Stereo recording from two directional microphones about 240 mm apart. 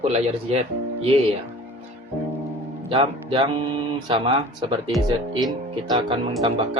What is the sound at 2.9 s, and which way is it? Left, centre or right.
Speech, right.